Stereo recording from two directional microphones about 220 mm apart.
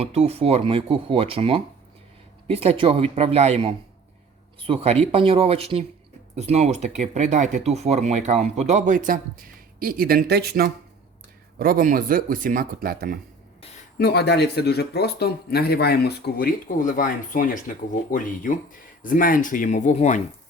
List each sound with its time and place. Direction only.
0.0 s speech: 30° right (ahead or behind)
14.0 s speech: 50° left (ahead or behind)